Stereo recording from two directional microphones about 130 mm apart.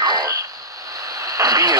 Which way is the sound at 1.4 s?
30° right (ahead or behind).